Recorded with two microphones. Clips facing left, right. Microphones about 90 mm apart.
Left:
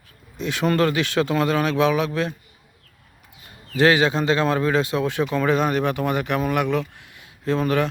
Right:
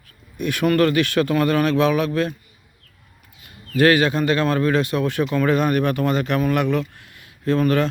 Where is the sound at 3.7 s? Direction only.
20° left (ahead or behind).